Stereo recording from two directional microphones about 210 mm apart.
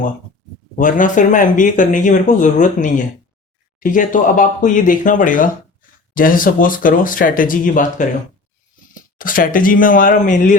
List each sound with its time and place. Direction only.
0.8 s speech: 40° left (ahead or behind)
9.1 s speech: 40° left (ahead or behind)